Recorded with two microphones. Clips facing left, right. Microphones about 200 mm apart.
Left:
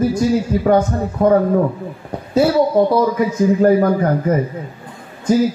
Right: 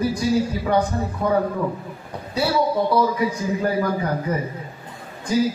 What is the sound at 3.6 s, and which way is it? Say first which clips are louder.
Speech: left 8 dB; 50° left (ahead or behind).